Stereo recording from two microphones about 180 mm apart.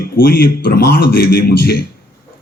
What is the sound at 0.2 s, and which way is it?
Speech, 55° left (ahead or behind).